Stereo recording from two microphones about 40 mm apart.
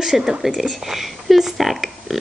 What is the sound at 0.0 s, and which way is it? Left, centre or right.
Speech, centre.